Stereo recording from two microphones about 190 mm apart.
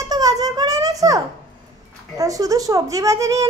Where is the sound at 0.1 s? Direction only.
20° right (ahead or behind).